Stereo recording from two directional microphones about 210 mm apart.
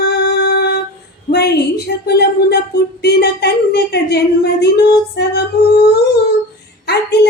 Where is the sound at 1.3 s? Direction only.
50° left (ahead or behind).